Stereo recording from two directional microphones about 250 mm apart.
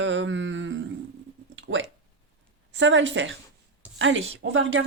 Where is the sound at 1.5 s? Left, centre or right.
Right.